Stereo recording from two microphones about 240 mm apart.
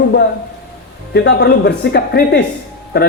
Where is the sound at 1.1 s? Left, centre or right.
Left.